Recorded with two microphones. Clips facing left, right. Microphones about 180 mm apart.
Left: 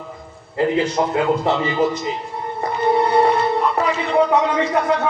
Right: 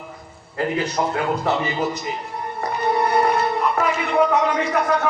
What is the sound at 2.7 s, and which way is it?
Music, 25° left (ahead or behind).